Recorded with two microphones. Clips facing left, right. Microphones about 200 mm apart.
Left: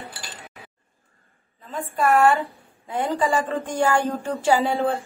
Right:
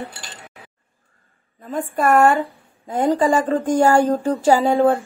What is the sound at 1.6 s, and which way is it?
Speech, 50° right (ahead or behind).